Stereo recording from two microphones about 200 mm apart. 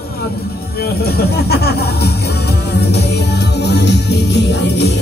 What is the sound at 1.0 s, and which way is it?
Speech, 50° left (ahead or behind).